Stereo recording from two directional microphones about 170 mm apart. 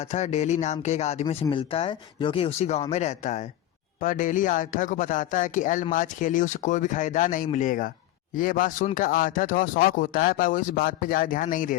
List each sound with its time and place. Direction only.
0.0 s speech: 40° left (ahead or behind)